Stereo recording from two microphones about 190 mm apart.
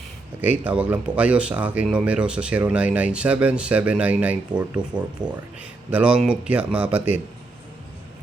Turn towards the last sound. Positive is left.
turn(degrees=-10)  # may be behind; listen again after turning